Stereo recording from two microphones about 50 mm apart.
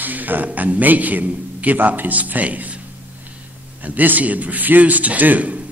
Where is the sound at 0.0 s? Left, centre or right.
Right.